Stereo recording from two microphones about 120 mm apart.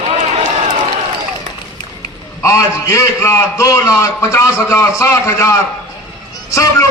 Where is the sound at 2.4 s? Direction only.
25° left (ahead or behind).